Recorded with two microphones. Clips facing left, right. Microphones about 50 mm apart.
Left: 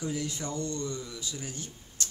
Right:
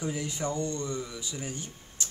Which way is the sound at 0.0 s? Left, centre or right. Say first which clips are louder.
Right 2 dB; right.